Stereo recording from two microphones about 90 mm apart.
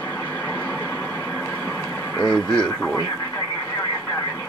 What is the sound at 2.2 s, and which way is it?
Speech, 5° left (ahead or behind).